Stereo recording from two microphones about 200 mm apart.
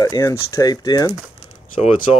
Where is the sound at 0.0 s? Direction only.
15° left (ahead or behind).